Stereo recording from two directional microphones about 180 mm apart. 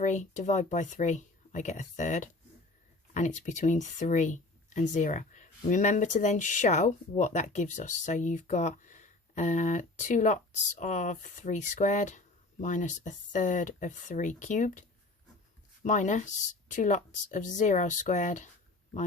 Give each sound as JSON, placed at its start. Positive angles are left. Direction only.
{"t": 0.0, "sound": "speech", "side_deg": 45}